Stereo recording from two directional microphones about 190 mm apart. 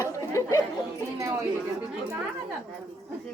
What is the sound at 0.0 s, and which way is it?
Chatter, 15° left (ahead or behind).